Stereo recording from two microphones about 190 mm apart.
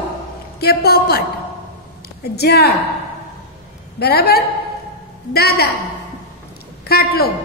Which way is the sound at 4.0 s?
55° left (ahead or behind).